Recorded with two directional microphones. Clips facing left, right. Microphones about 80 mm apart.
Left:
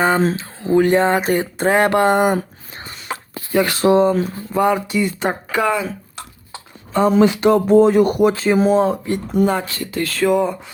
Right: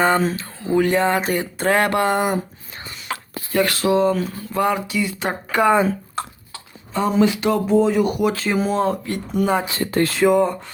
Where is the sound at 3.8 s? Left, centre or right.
Left.